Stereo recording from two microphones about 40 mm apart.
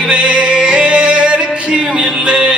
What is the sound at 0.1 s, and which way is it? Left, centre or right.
Music, right.